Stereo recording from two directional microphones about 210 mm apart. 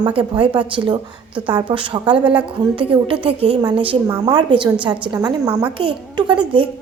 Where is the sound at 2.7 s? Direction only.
25° right (ahead or behind).